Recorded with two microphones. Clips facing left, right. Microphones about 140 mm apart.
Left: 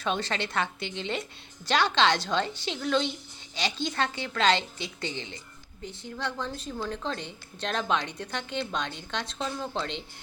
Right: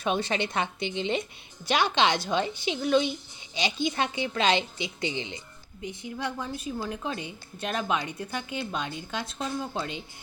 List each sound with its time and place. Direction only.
0.0 s a woman's voice: 15° right (ahead or behind)